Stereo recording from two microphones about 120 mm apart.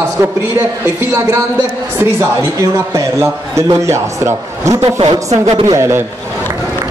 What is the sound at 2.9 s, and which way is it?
A man's voice, 25° right (ahead or behind).